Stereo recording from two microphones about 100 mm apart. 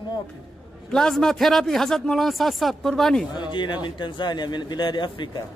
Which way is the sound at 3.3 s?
50° left (ahead or behind).